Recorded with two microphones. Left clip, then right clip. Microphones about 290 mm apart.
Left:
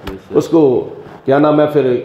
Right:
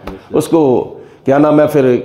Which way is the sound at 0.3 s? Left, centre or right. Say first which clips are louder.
Even; right.